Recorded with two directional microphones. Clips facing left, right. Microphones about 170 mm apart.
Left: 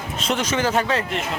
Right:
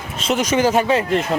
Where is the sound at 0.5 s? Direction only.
15° right (ahead or behind).